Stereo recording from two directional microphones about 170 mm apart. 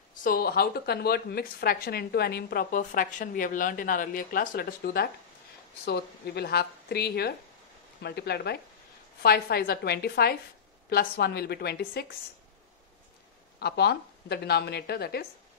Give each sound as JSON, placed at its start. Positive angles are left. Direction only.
{"t": 0.1, "sound": "speech", "side_deg": 55}
{"t": 5.9, "sound": "a woman's voice", "side_deg": 70}
{"t": 13.6, "sound": "a woman's voice", "side_deg": 70}